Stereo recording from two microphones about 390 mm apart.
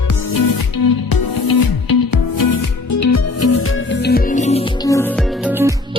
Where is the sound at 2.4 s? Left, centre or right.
Left; by 5.1 s centre.